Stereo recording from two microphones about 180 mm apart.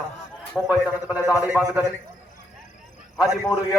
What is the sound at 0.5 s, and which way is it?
A man's voice, 5° right (ahead or behind).